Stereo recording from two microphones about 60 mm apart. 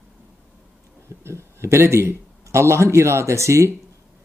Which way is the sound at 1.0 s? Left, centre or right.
Right.